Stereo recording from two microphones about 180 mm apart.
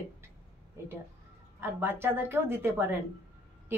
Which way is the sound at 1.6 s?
10° right (ahead or behind).